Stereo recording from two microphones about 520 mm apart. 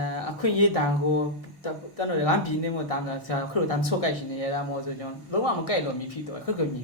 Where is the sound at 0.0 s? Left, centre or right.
Left.